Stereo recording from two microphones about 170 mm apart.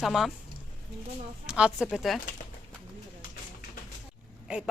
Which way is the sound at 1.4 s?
5° right (ahead or behind).